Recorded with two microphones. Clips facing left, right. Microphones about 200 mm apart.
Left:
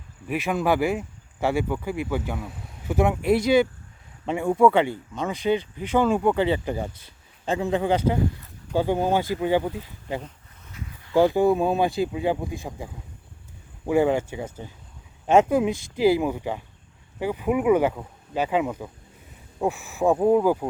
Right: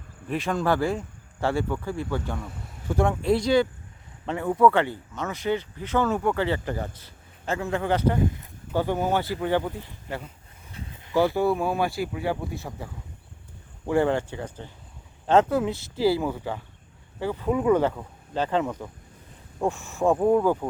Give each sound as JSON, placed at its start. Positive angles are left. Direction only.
{"t": 0.3, "sound": "speech", "side_deg": 10}
{"t": 10.7, "sound": "a sound", "side_deg": -30}
{"t": 11.1, "sound": "speech", "side_deg": 15}